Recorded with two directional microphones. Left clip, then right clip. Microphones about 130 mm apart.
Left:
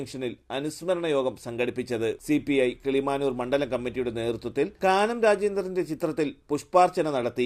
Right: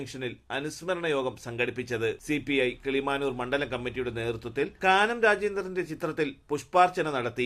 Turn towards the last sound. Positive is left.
turn(degrees=45)  # may be behind; listen again after turning